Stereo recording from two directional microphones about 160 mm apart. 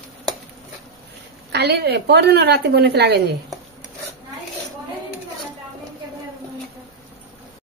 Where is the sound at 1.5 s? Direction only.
90° right.